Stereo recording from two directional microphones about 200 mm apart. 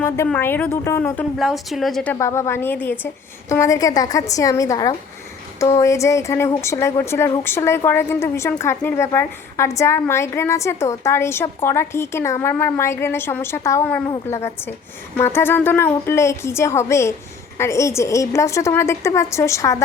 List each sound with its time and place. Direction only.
0.3 s a woman's voice: 10° left (ahead or behind)
1.4 s a woman's voice: centre (ahead or behind)
2.1 s a woman's voice: 15° left (ahead or behind)